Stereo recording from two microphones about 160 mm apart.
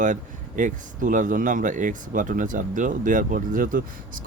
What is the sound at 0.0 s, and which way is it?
Speech, 55° right (ahead or behind).